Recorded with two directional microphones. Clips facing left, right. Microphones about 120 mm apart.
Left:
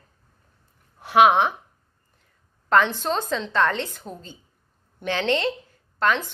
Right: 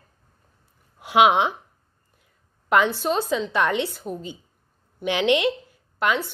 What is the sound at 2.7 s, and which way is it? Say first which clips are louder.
Speech: even; 10° right (ahead or behind).